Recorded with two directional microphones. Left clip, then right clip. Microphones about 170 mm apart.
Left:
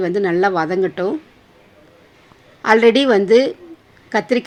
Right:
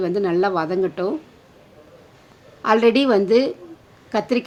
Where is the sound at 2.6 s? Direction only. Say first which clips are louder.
Left 4 dB; 10° left (ahead or behind).